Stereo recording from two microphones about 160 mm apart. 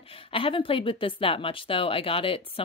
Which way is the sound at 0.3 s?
35° left (ahead or behind).